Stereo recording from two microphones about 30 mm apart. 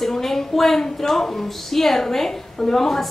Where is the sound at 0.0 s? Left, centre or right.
Centre.